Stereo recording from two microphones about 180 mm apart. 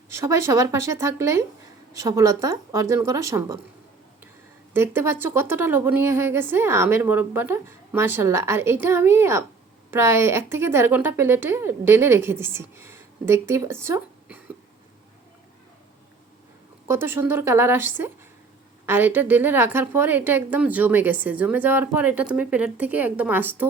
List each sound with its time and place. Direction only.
0.1 s a woman's voice: 15° right (ahead or behind)
4.7 s a woman's voice: 10° right (ahead or behind)
16.9 s a woman's voice: 10° right (ahead or behind)